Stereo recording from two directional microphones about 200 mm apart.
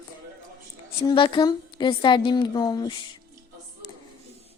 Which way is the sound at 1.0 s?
25° left (ahead or behind).